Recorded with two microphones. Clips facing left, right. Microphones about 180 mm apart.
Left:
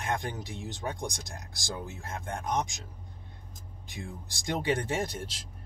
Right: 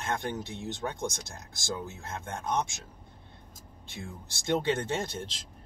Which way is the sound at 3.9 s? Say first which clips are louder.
Left 1 dB; 15° left (ahead or behind).